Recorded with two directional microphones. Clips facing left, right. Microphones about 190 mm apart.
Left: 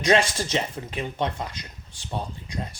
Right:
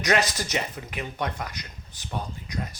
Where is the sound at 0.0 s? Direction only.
25° left (ahead or behind).